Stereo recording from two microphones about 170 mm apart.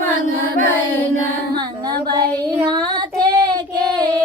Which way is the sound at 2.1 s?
25° right (ahead or behind).